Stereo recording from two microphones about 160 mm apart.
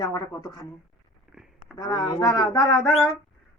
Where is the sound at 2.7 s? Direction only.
Centre (ahead or behind).